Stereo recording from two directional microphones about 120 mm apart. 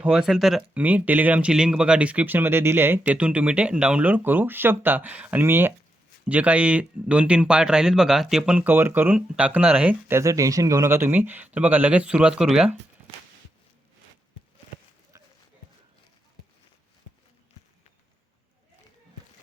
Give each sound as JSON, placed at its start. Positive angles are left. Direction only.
{"t": 0.0, "sound": "speech", "side_deg": -5}
{"t": 15.1, "sound": "run", "side_deg": -30}